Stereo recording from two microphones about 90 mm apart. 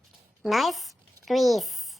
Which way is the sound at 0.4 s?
Centre (ahead or behind).